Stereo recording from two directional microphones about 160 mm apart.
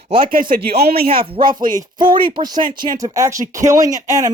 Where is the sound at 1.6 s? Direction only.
55° right (ahead or behind).